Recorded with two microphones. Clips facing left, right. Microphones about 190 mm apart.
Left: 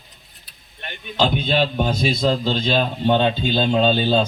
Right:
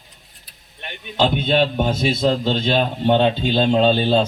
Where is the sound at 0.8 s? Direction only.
20° right (ahead or behind).